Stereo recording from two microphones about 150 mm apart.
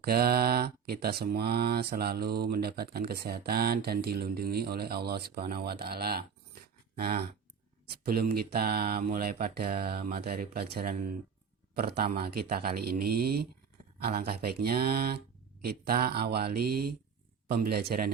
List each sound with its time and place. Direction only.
0.0 s speech: 90° right